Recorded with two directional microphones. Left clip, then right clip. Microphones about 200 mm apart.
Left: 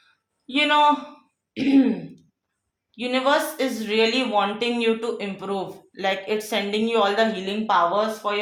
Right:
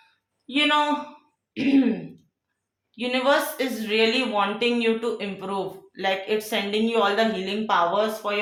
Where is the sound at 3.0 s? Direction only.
20° left (ahead or behind).